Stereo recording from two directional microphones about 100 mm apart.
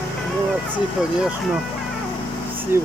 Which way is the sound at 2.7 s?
20° right (ahead or behind).